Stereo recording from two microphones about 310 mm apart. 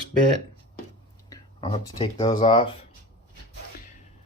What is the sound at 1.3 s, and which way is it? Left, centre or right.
Speech, centre.